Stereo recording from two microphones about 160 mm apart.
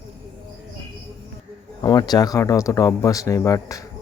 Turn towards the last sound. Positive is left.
turn(degrees=20)  # may be behind; listen again after turning